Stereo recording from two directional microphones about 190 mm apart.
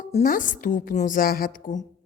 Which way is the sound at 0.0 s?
45° left (ahead or behind).